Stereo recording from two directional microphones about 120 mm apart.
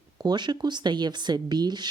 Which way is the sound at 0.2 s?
35° right (ahead or behind).